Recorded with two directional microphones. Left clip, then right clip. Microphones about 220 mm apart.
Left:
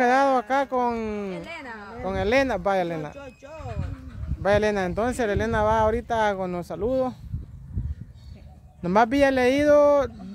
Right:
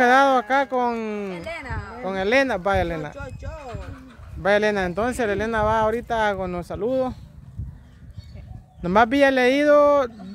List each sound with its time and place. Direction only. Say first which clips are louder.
0.0 s speech: right 4 dB; 10° right (ahead or behind)
1.4 s a woman's voice: right 4 dB; 20° right (ahead or behind)
2.0 s speech: right 2 dB; centre (ahead or behind)
8.8 s speech: right 3 dB; 5° right (ahead or behind)